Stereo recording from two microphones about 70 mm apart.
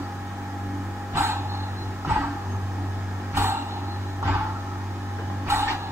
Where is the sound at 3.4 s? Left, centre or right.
Right.